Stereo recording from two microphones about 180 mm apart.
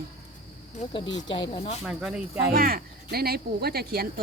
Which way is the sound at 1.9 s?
5° right (ahead or behind).